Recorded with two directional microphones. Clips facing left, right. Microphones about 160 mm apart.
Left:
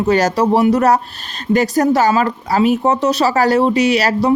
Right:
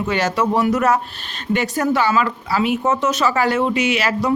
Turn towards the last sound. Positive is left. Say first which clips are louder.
# left 5 dB
turn(degrees=35)  # may be behind; listen again after turning